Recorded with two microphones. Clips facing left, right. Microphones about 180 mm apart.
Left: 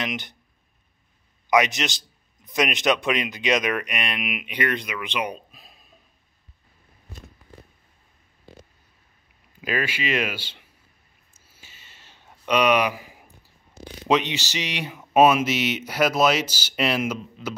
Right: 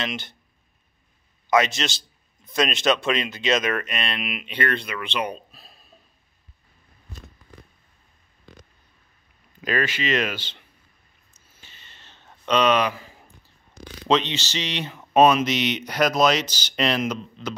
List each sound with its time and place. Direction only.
0.0 s a man's voice: 15° left (ahead or behind)
1.5 s a man's voice: 15° left (ahead or behind)
9.6 s a man's voice: 10° left (ahead or behind)
11.4 s a sound: 10° left (ahead or behind)
14.0 s a man's voice: 15° left (ahead or behind)